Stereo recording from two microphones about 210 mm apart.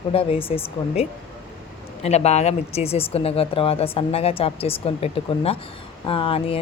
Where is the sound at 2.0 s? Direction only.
30° left (ahead or behind).